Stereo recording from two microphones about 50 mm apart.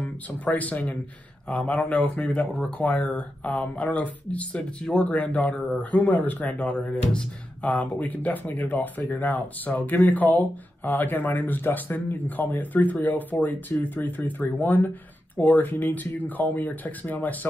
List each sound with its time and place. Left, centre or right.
0.5 s speech: left
1.5 s speech: centre
5.1 s speech: left